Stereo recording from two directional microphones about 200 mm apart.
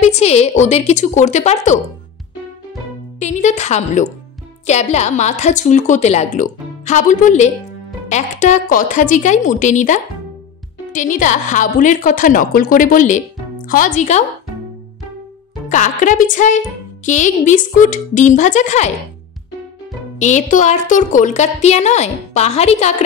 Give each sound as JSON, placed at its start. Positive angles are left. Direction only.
{"t": 0.0, "sound": "a woman's voice", "side_deg": 35}
{"t": 3.2, "sound": "a woman's voice", "side_deg": 35}
{"t": 15.7, "sound": "a woman's voice", "side_deg": 40}
{"t": 20.2, "sound": "a woman's voice", "side_deg": 35}